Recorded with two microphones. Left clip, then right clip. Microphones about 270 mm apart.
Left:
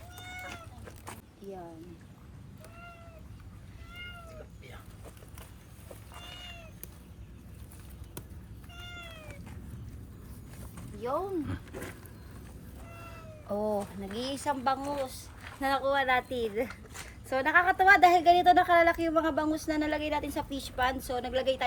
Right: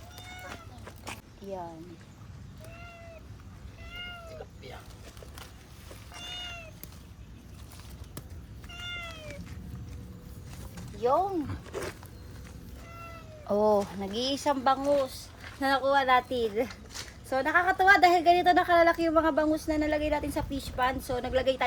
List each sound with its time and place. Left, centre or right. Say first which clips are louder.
0.9 s duck: right 6 dB; centre
13.5 s a woman's voice: right 7 dB; right